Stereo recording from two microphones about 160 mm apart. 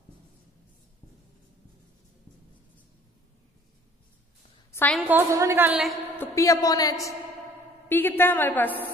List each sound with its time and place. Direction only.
5.0 s a woman's voice: 15° right (ahead or behind)
6.1 s a woman's voice: 20° left (ahead or behind)